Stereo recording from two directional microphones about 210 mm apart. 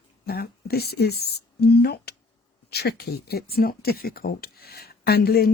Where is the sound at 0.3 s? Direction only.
50° left (ahead or behind).